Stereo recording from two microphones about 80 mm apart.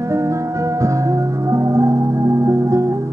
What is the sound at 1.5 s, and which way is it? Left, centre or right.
Music, right.